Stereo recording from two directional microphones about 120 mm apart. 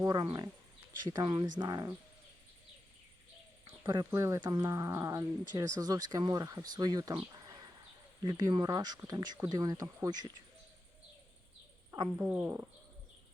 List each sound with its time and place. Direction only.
0.0 s speech: 35° right (ahead or behind)
3.7 s a sound: 35° right (ahead or behind)
4.1 s speech: 25° right (ahead or behind)
4.4 s speech: 35° right (ahead or behind)
12.2 s speech: 20° right (ahead or behind)